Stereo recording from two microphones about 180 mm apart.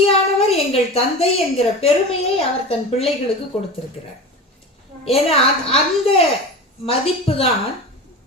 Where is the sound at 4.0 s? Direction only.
35° left (ahead or behind).